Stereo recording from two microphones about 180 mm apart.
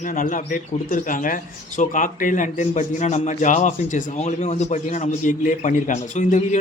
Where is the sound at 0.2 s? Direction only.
45° left (ahead or behind).